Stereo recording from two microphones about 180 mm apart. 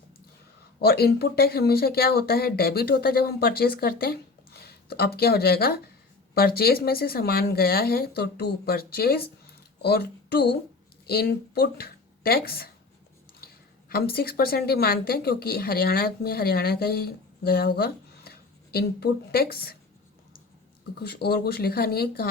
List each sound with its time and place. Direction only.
0.8 s speech: 60° left (ahead or behind)
13.9 s speech: 60° left (ahead or behind)
21.0 s speech: 65° left (ahead or behind)